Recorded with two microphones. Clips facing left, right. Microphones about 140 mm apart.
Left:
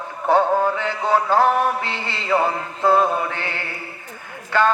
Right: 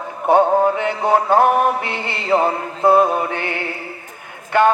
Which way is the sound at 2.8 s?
20° right (ahead or behind).